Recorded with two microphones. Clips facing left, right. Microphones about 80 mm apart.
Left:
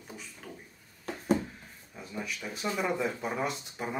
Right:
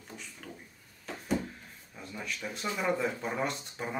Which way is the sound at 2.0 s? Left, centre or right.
Centre.